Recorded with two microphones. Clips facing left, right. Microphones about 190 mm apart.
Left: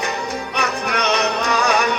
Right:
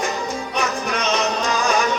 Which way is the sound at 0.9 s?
65° left (ahead or behind).